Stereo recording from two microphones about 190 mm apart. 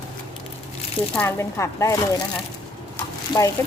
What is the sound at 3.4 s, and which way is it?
Speech, 15° left (ahead or behind).